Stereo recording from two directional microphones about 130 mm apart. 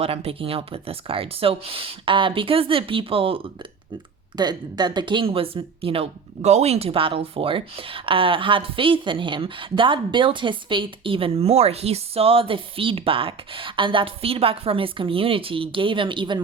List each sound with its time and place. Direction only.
0.0 s speech: 50° right (ahead or behind)
4.4 s speech: 35° right (ahead or behind)